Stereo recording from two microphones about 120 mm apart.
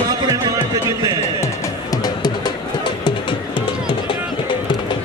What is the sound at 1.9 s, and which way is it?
Music, 35° left (ahead or behind).